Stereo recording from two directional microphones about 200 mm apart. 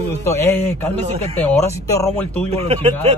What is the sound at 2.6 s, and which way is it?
Speech, 30° right (ahead or behind).